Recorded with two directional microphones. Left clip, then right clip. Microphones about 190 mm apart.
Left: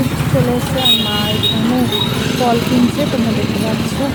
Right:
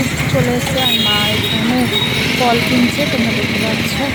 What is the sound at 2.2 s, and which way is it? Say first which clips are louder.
Speech: right 2 dB; 70° left (ahead or behind).